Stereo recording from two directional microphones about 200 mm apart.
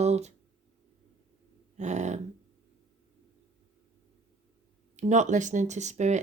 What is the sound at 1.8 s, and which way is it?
Speech, 35° right (ahead or behind).